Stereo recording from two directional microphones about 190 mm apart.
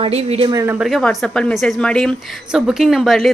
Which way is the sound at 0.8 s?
Centre (ahead or behind).